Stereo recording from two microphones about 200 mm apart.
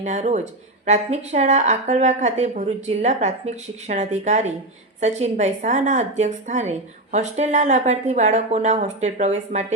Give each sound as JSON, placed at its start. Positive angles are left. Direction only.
{"t": 0.0, "sound": "a woman's voice", "side_deg": -35}